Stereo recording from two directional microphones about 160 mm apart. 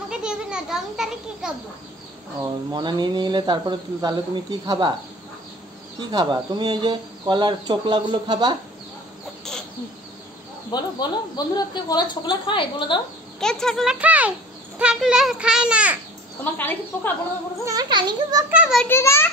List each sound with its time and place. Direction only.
0.1 s a child's voice: 5° right (ahead or behind)
2.4 s speech: 25° right (ahead or behind)
6.1 s speech: 25° right (ahead or behind)
10.7 s a woman's voice: 25° left (ahead or behind)
13.4 s a child's voice: 5° left (ahead or behind)
16.5 s speech: 10° left (ahead or behind)
17.6 s speech: 25° right (ahead or behind)
18.5 s a child's voice: 10° right (ahead or behind)
18.9 s speech: 15° left (ahead or behind)